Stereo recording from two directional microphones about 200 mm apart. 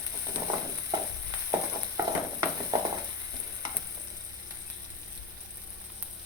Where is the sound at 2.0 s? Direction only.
15° right (ahead or behind).